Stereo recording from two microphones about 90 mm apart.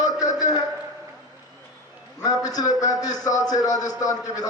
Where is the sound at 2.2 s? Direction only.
45° left (ahead or behind).